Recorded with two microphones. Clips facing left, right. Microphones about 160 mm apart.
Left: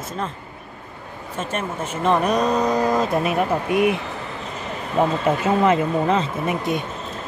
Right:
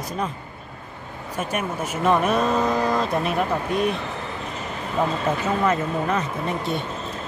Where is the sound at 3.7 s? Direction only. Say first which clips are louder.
Left 4 dB; 15° left (ahead or behind).